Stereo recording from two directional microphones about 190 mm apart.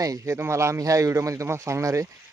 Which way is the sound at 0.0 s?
15° right (ahead or behind).